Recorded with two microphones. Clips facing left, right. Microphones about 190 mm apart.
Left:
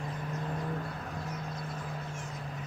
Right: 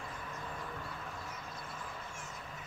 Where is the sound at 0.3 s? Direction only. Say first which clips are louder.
Left 10 dB; 45° left (ahead or behind).